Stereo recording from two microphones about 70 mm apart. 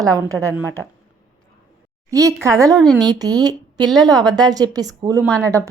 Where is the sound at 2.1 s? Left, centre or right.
Right.